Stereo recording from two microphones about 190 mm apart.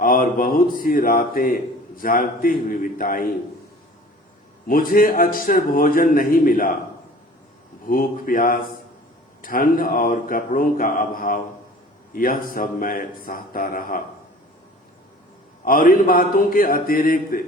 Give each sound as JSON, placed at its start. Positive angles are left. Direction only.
{"t": 0.0, "sound": "a man's voice", "side_deg": 45}
{"t": 4.7, "sound": "a man's voice", "side_deg": 50}
{"t": 7.9, "sound": "a man's voice", "side_deg": 50}
{"t": 15.6, "sound": "a man's voice", "side_deg": 50}